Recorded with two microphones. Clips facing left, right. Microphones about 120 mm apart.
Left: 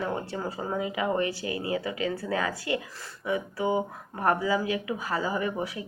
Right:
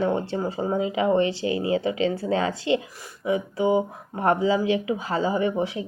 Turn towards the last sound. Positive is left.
turn(degrees=-25)  # may be behind; listen again after turning